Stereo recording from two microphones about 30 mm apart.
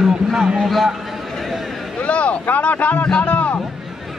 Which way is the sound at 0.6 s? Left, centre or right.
Centre.